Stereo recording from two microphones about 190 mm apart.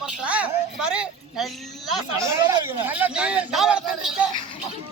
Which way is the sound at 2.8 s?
10° right (ahead or behind).